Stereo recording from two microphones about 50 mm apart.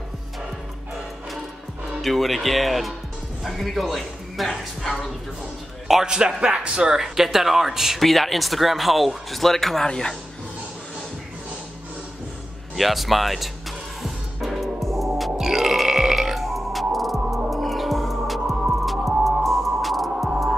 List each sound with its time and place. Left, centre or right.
2.0 s speech: centre
5.9 s a man's voice: centre
7.0 s a man's voice: centre
12.7 s music: centre
15.3 s burping: centre
17.5 s music: centre